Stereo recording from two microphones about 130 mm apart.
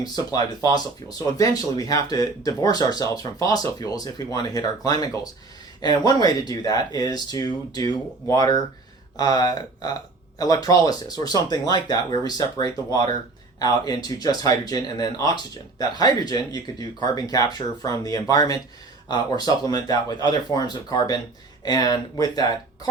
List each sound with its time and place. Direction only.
0.0 s speech: 30° left (ahead or behind)